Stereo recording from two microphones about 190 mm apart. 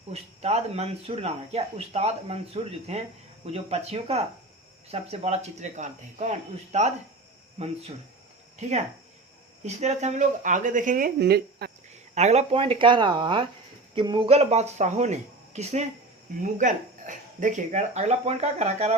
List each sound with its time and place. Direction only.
0.1 s speech: 35° right (ahead or behind)
9.6 s speech: 35° right (ahead or behind); by 11.7 s 55° right (ahead or behind)
12.1 s speech: 35° right (ahead or behind)